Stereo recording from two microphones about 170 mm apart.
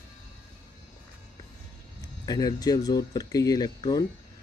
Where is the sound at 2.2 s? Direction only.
25° left (ahead or behind).